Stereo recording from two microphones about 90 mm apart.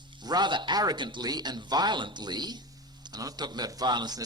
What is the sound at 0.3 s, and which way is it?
Speech, 55° right (ahead or behind).